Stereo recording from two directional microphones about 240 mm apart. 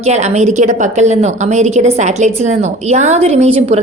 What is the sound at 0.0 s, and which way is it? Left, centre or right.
A woman's voice, right.